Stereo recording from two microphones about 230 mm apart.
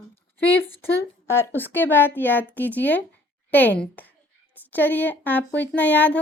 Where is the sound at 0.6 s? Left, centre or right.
Centre.